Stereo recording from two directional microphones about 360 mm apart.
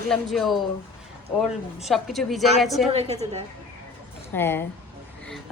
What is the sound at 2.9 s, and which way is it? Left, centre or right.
Speech, centre.